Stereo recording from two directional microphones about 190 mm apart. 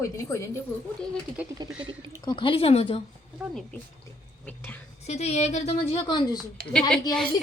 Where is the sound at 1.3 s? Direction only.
5° right (ahead or behind).